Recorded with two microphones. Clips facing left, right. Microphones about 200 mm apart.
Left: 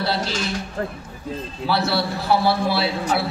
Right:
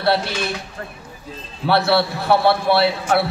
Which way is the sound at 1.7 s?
60° right (ahead or behind).